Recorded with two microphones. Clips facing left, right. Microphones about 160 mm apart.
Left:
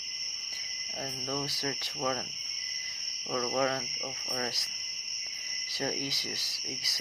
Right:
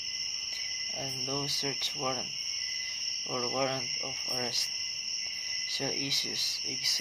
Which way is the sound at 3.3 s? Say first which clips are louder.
Left 2 dB; 20° right (ahead or behind).